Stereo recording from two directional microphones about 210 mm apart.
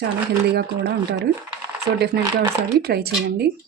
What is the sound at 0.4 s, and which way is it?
Dishes, 50° right (ahead or behind).